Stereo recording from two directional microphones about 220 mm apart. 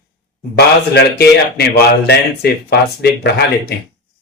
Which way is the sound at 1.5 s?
45° left (ahead or behind).